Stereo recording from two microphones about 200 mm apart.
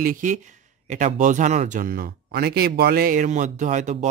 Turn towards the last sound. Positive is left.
turn(degrees=-35)  # may be behind; listen again after turning